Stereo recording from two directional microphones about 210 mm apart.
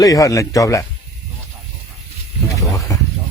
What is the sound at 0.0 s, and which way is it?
Speech, 15° left (ahead or behind).